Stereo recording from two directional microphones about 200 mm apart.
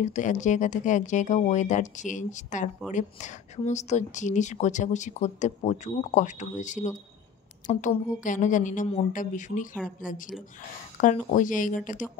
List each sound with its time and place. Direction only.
0.0 s speech: 35° left (ahead or behind)